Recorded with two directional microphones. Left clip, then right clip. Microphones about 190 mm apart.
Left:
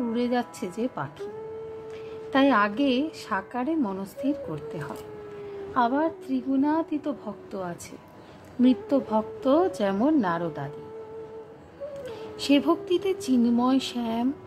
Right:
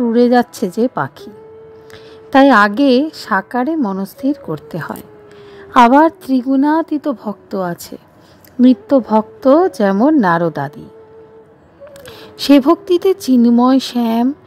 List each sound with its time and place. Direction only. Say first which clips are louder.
0.1 s a woman's voice: right 18 dB; 50° right (ahead or behind)
2.3 s a woman's voice: right 13 dB; 50° right (ahead or behind)
5.8 s a woman's voice: right 16 dB; 60° right (ahead or behind)
12.4 s a woman's voice: right 12 dB; 50° right (ahead or behind)